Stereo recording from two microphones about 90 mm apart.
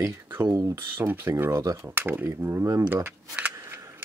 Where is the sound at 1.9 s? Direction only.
25° right (ahead or behind).